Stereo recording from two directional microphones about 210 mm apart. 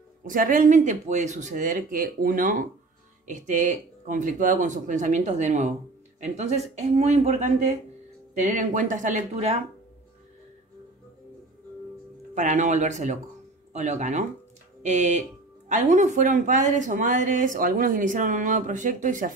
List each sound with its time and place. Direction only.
0.2 s a woman's voice: 40° right (ahead or behind)
12.4 s a woman's voice: 35° right (ahead or behind)